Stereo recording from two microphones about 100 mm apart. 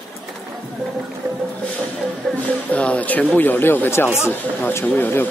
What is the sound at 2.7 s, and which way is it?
Speech, 15° left (ahead or behind).